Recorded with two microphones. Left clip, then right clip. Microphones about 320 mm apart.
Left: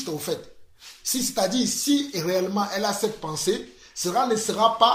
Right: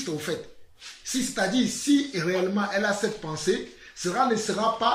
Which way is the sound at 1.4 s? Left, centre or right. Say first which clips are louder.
Left 2 dB; centre.